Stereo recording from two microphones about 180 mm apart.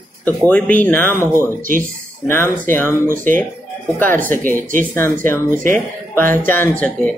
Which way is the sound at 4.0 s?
10° left (ahead or behind).